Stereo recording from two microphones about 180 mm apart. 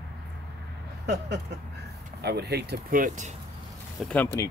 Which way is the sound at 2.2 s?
65° right (ahead or behind).